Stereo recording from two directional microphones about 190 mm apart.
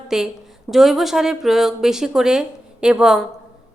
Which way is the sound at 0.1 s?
5° right (ahead or behind).